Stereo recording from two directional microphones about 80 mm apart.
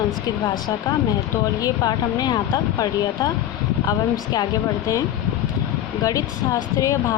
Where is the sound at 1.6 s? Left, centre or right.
Left.